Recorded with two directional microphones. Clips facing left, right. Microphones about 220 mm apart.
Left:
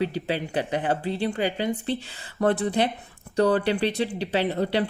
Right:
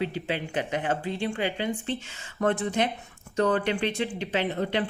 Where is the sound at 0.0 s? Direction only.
40° left (ahead or behind).